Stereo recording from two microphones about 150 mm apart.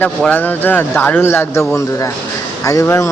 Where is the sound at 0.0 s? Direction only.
10° left (ahead or behind).